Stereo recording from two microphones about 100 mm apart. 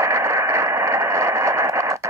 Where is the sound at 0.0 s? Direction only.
30° right (ahead or behind).